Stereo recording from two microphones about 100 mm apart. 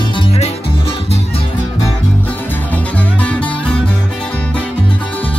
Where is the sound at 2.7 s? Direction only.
15° left (ahead or behind).